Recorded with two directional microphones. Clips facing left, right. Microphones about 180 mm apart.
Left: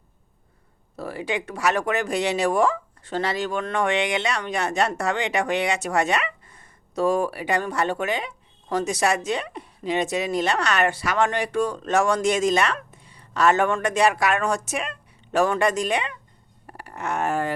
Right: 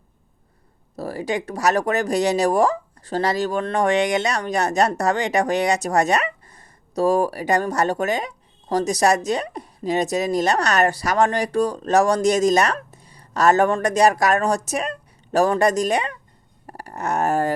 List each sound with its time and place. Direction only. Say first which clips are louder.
0.9 s a woman's voice: right 3 dB; 40° right (ahead or behind)